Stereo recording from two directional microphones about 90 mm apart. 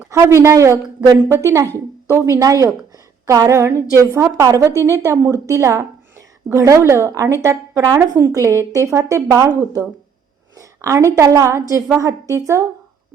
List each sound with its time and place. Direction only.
0.1 s a woman's voice: 35° right (ahead or behind)